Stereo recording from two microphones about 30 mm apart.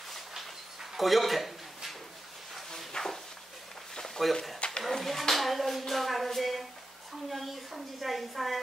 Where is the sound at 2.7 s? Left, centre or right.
Centre.